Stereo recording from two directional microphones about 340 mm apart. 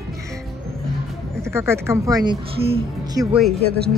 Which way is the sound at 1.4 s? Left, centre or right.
Centre.